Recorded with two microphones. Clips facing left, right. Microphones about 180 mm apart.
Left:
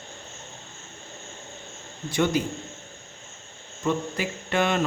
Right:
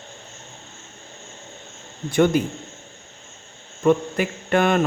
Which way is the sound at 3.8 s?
55° right (ahead or behind).